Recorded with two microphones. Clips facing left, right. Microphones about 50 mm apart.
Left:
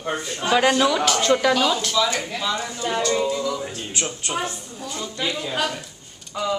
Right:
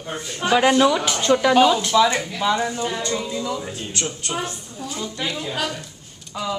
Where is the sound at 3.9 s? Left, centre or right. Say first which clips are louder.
Left 1 dB; centre.